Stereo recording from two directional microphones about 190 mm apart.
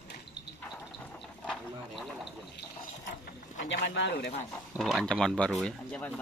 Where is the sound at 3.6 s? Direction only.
70° left (ahead or behind).